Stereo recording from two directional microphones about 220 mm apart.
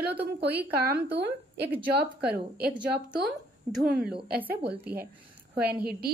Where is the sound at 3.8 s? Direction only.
45° right (ahead or behind).